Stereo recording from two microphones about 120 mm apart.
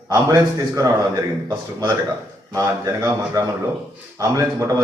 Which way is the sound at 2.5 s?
25° right (ahead or behind).